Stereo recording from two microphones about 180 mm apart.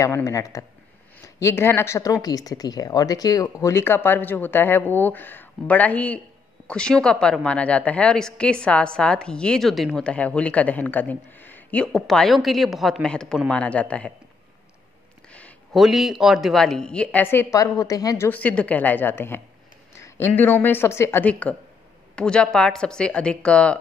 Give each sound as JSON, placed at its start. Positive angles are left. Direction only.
{"t": 0.0, "sound": "a woman's voice", "side_deg": 15}
{"t": 15.2, "sound": "a woman's voice", "side_deg": 5}